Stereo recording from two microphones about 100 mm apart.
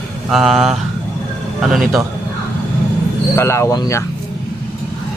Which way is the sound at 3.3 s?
25° left (ahead or behind).